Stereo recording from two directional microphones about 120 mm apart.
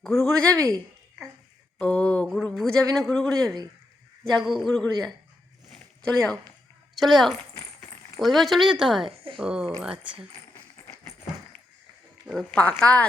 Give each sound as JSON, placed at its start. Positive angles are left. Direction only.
{"t": 0.0, "sound": "speech", "side_deg": 5}
{"t": 1.8, "sound": "mantra", "side_deg": 10}
{"t": 2.9, "sound": "a man's voice", "side_deg": 5}
{"t": 3.4, "sound": "speech", "side_deg": -30}
{"t": 4.2, "sound": "a man's voice", "side_deg": 0}
{"t": 9.0, "sound": "speech", "side_deg": -45}
{"t": 9.4, "sound": "speech", "side_deg": -5}
{"t": 12.3, "sound": "mantra", "side_deg": 5}